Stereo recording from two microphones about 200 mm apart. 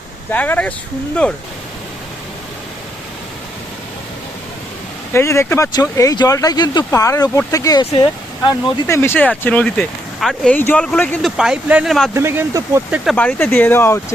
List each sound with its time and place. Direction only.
0.3 s speech: 10° left (ahead or behind)
5.1 s speech: 15° left (ahead or behind)
9.0 s speech: 10° left (ahead or behind)
12.1 s speech: 15° right (ahead or behind)
13.1 s speech: 5° left (ahead or behind)